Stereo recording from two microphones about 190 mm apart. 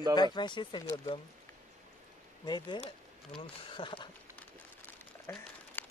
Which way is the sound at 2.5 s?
25° left (ahead or behind).